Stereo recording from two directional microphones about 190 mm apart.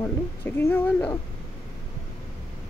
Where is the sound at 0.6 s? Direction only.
10° left (ahead or behind).